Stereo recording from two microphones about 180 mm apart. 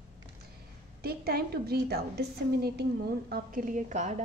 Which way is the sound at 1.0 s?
60° right (ahead or behind).